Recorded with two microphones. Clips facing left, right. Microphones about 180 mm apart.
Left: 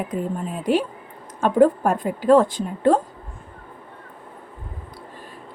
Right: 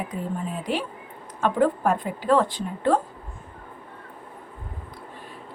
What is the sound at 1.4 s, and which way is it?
A woman's voice, 45° left (ahead or behind).